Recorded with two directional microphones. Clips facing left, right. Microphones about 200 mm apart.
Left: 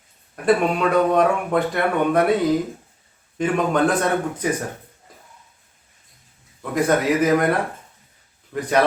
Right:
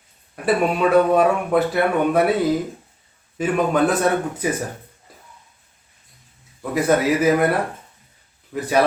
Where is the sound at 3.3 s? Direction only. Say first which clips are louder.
Right 1 dB; 5° right (ahead or behind).